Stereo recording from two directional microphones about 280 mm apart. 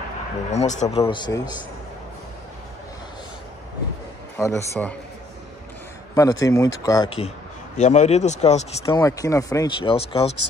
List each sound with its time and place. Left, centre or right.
0.5 s speech: left
4.4 s speech: centre
6.1 s speech: centre